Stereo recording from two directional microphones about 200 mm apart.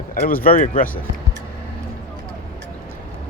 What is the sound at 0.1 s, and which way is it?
Speech, 45° left (ahead or behind).